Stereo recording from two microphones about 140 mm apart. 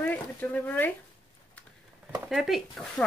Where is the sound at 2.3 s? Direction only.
Centre (ahead or behind).